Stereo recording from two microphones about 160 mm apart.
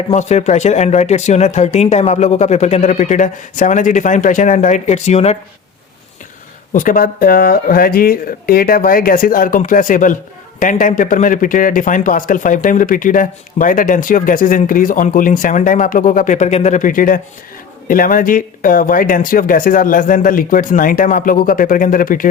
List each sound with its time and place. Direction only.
0.1 s speech: 45° left (ahead or behind)
6.7 s a man's voice: 60° left (ahead or behind)